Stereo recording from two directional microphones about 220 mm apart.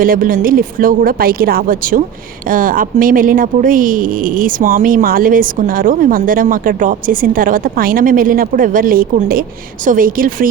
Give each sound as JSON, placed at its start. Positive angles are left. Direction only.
{"t": 0.0, "sound": "speech", "side_deg": -40}